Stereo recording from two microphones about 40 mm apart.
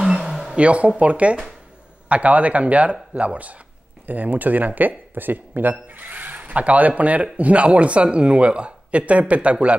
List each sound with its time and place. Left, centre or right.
0.0 s a sound: centre
0.6 s speech: right
4.0 s speech: right